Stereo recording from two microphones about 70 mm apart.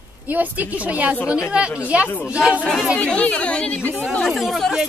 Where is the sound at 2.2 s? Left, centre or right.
Centre.